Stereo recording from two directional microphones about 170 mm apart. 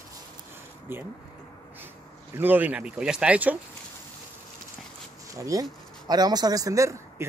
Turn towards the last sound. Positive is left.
turn(degrees=-20)  # may be behind; listen again after turning